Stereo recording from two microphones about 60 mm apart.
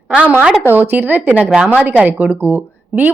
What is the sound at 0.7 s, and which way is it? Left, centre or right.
A woman's voice, right.